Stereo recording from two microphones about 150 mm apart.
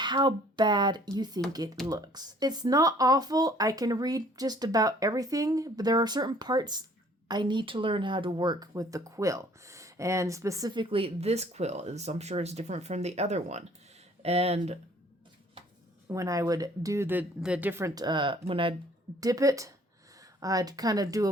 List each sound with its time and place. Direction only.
0.0 s speech: 30° right (ahead or behind)
16.0 s speech: 20° right (ahead or behind)
19.2 s speech: 25° right (ahead or behind)